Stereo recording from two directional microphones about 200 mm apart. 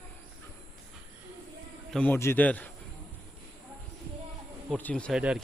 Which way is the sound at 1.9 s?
5° left (ahead or behind).